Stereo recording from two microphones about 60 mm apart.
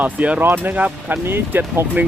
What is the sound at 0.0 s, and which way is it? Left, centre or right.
Speech, right.